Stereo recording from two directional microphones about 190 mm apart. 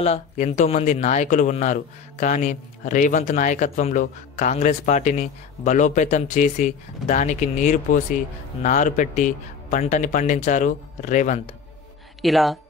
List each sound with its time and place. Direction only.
0.0 s speech: 35° left (ahead or behind)
12.2 s speech: centre (ahead or behind)